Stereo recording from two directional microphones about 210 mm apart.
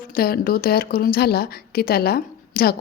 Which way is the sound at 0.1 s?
45° left (ahead or behind).